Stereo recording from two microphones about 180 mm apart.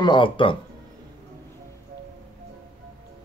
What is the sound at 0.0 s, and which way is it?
Speech, 25° left (ahead or behind).